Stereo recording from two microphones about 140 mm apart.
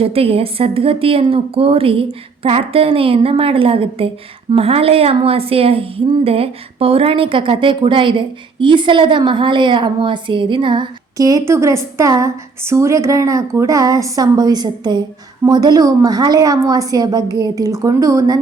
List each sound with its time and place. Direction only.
0.0 s a woman's voice: 45° right (ahead or behind); by 18.3 s 25° right (ahead or behind)